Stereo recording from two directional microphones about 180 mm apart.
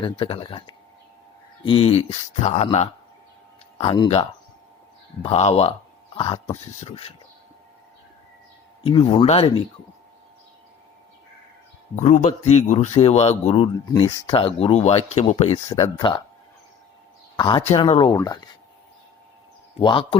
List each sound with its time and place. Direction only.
0.0 s speech: 30° left (ahead or behind)
8.8 s speech: 30° left (ahead or behind)
11.9 s speech: 40° left (ahead or behind)
13.8 s speech: 20° left (ahead or behind)
17.3 s speech: 25° left (ahead or behind)
18.2 s speech: 20° left (ahead or behind)
19.8 s speech: 30° left (ahead or behind)